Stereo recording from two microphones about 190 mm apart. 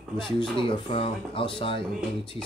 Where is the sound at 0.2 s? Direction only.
25° left (ahead or behind).